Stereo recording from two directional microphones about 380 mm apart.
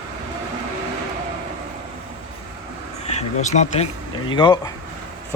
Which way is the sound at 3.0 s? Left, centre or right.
Centre.